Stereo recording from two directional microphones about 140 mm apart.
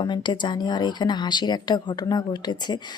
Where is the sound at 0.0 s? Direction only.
35° left (ahead or behind).